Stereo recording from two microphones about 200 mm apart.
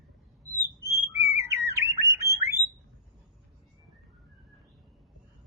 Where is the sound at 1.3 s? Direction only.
15° right (ahead or behind).